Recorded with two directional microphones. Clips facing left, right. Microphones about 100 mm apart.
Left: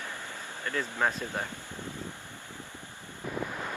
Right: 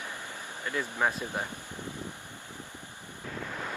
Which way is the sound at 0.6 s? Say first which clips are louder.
Even; 15° right (ahead or behind).